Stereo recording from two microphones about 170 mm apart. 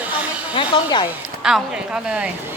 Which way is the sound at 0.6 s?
25° left (ahead or behind).